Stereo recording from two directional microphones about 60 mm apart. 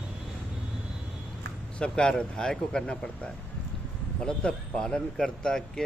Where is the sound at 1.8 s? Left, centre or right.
Centre.